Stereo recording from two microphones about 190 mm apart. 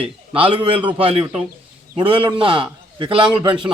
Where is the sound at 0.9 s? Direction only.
25° right (ahead or behind).